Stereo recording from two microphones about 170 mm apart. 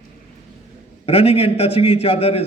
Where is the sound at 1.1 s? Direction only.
35° left (ahead or behind).